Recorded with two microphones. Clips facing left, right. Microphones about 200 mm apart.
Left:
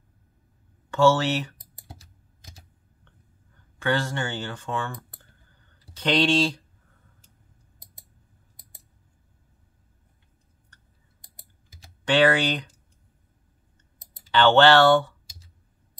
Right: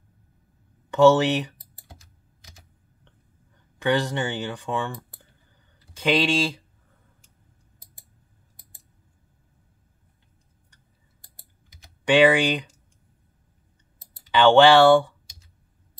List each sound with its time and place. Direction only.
0.8 s speech: 15° right (ahead or behind)
3.8 s speech: 15° right (ahead or behind)
5.9 s speech: 10° right (ahead or behind)
12.0 s speech: 10° right (ahead or behind)
14.3 s speech: 15° right (ahead or behind)